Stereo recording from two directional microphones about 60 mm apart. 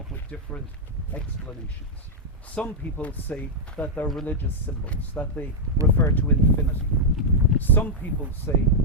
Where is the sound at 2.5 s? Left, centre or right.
Left.